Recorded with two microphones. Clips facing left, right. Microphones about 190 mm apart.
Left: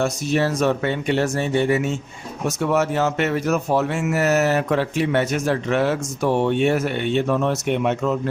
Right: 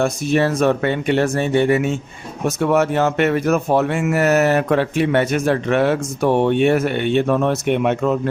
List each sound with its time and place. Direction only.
0.0 s speech: 55° right (ahead or behind)